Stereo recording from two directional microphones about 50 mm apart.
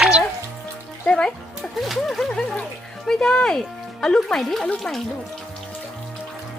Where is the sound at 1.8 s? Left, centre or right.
Centre.